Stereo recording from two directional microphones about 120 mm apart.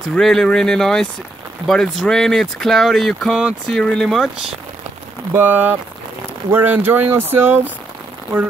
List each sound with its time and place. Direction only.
0.1 s speech: 5° left (ahead or behind)
5.3 s speech: 15° right (ahead or behind)